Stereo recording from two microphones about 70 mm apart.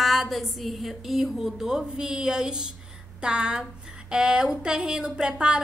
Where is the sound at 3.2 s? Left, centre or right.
Centre.